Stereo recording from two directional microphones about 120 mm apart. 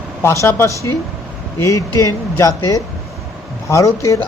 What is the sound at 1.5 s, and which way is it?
Speech, 25° left (ahead or behind).